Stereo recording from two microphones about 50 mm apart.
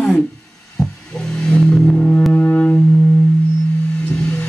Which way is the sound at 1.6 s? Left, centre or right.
Centre.